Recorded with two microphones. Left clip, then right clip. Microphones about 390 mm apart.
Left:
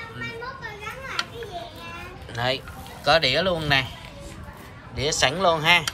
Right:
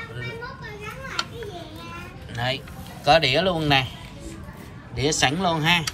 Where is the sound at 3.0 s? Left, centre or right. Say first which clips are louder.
Right 1 dB; centre.